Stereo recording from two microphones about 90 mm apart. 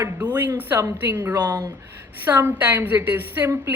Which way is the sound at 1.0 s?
25° right (ahead or behind).